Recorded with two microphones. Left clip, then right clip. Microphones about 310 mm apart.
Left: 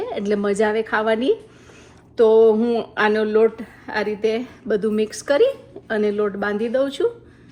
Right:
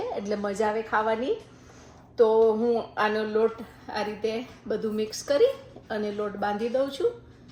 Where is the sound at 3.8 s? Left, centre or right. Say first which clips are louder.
Left 8 dB; centre.